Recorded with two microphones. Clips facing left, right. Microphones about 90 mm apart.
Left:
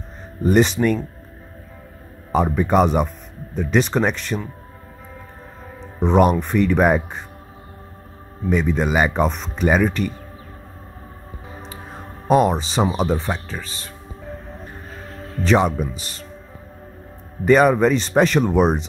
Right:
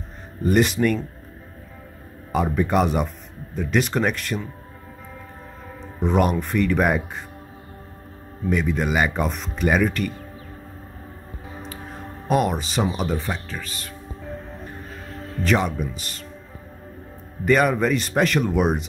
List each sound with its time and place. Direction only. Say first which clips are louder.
0.5 s speech: left 3 dB; 25° left (ahead or behind)
2.3 s speech: left 3 dB; 20° left (ahead or behind)
5.8 s music: left 4 dB; 25° left (ahead or behind)
6.3 s speech: left 3 dB; 25° left (ahead or behind)
8.5 s speech: left 3 dB; 25° left (ahead or behind)
12.3 s speech: left 5 dB; 30° left (ahead or behind)
15.4 s a man's voice: left 4 dB; 30° left (ahead or behind)
17.5 s speech: left 5 dB; 30° left (ahead or behind)